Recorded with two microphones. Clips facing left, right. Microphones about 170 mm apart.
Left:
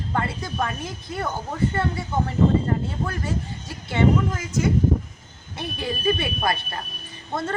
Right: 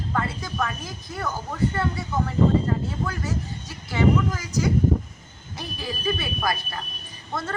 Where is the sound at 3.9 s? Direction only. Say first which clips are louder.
Left 1 dB; 25° left (ahead or behind).